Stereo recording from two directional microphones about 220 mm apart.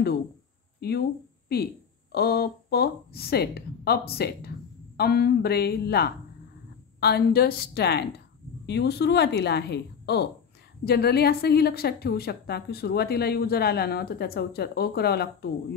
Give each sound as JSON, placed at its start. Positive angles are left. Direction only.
{"t": 0.7, "sound": "a woman's voice", "side_deg": 45}